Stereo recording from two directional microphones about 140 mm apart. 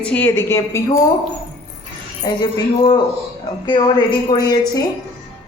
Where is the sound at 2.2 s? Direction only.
30° left (ahead or behind).